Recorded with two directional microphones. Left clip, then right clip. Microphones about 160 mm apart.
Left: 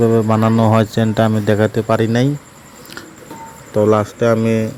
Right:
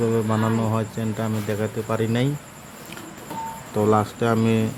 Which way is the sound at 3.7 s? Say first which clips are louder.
Left 7 dB; 20° left (ahead or behind).